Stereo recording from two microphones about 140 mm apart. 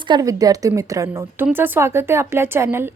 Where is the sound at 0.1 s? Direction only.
25° right (ahead or behind).